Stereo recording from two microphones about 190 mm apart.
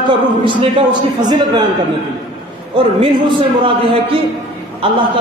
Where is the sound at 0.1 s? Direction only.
25° right (ahead or behind).